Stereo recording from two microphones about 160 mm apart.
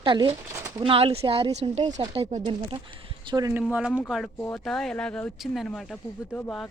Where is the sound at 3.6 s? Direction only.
5° right (ahead or behind).